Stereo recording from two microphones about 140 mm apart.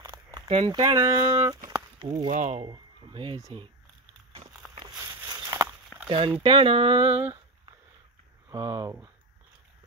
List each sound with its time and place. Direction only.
0.0 s a sound: 30° right (ahead or behind)
0.7 s speech: 25° right (ahead or behind)
2.0 s speech: 35° right (ahead or behind)
2.2 s speech: 60° right (ahead or behind)
2.6 s speech: 35° right (ahead or behind)
4.9 s a sound: 20° right (ahead or behind)
6.0 s speech: 40° right (ahead or behind)
8.5 s speech: 25° right (ahead or behind)